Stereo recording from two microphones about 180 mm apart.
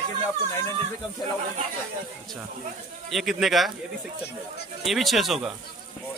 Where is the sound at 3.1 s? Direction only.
Centre (ahead or behind).